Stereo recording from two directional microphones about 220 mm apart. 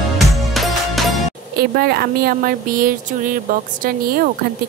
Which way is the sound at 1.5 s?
45° right (ahead or behind).